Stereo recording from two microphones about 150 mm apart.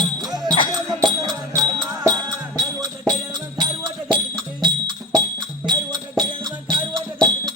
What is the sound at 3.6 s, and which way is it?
Music, 35° right (ahead or behind).